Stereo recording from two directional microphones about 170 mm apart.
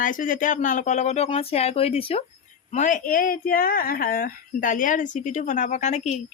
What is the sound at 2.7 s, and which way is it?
Speech, 50° left (ahead or behind).